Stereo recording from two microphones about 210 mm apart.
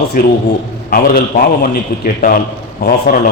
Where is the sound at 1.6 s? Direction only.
45° left (ahead or behind).